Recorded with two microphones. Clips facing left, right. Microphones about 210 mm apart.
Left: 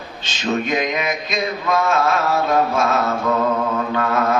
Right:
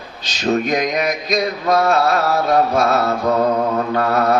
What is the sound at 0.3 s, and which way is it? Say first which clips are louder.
Mantra: right 3 dB; 40° right (ahead or behind).